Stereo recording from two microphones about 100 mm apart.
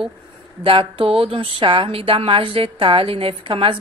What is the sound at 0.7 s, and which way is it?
A woman's voice, 60° right (ahead or behind).